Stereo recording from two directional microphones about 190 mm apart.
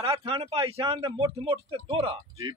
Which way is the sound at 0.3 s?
30° right (ahead or behind).